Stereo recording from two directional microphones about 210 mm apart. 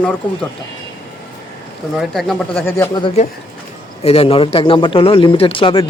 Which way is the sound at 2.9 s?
20° left (ahead or behind).